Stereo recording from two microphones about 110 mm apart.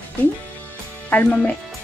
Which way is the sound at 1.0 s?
15° left (ahead or behind).